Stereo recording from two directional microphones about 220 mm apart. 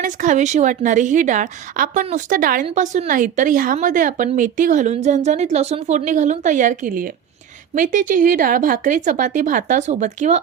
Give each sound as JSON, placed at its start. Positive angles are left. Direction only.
{"t": 0.0, "sound": "a woman's voice", "side_deg": -35}